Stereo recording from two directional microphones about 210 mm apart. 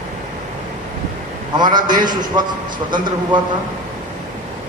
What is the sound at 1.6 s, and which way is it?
Speech, 20° right (ahead or behind).